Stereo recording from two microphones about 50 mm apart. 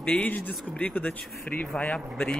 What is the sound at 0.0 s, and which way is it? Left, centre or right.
A man's voice, left.